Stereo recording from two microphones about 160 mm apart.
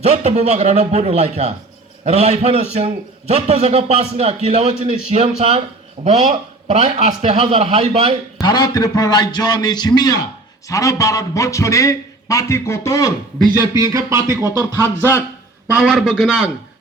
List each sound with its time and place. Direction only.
0.0 s a man's voice: 40° right (ahead or behind)
8.4 s a man's voice: 25° left (ahead or behind)
13.4 s speech: 20° right (ahead or behind)
15.6 s a man's voice: centre (ahead or behind)